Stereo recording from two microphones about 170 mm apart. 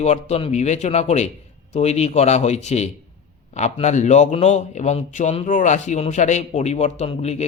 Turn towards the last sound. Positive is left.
turn(degrees=40)  # may be behind; listen again after turning